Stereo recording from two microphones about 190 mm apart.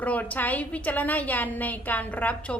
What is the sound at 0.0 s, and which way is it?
A woman's voice, 10° left (ahead or behind).